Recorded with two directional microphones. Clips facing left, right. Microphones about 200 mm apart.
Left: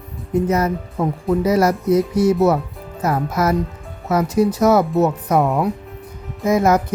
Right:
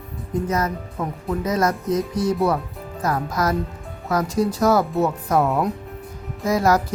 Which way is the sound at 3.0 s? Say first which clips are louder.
Left 3 dB; 25° left (ahead or behind).